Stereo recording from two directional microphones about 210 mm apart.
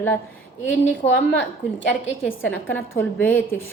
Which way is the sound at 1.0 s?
30° left (ahead or behind).